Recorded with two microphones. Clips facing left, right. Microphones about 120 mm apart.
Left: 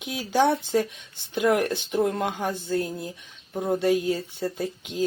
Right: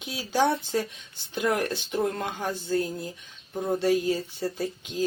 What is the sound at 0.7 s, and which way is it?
Speech, 5° left (ahead or behind).